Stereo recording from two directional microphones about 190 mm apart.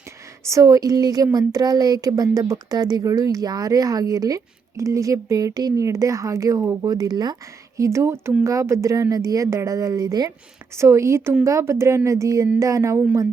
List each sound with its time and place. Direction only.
0.4 s speech: 15° right (ahead or behind)